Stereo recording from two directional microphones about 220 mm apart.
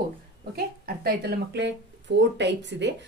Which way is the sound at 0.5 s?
45° right (ahead or behind).